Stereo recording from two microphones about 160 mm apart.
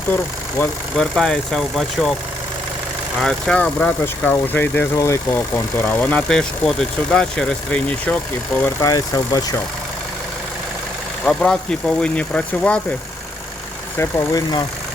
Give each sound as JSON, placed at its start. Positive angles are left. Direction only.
{"t": 0.6, "sound": "speech", "side_deg": 5}
{"t": 3.2, "sound": "speech", "side_deg": 5}
{"t": 8.6, "sound": "speech", "side_deg": 20}
{"t": 11.3, "sound": "speech", "side_deg": 5}
{"t": 13.9, "sound": "speech", "side_deg": 15}